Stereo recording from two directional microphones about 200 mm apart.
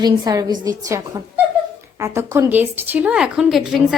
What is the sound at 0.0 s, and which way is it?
A woman's voice, 20° right (ahead or behind).